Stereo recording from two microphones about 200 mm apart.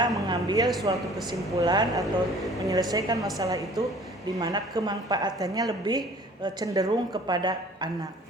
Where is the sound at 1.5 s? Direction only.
20° right (ahead or behind).